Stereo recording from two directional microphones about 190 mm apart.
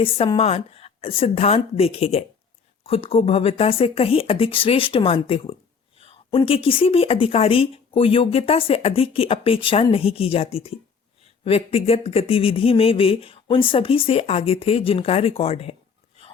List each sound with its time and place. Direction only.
0.0 s speech: 30° left (ahead or behind)